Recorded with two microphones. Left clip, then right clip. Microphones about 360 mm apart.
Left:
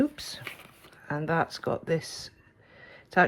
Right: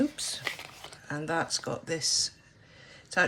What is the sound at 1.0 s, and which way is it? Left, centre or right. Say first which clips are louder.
Speech: left 3 dB; centre.